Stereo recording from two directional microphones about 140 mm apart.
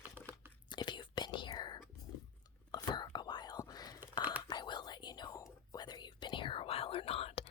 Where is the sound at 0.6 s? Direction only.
35° left (ahead or behind).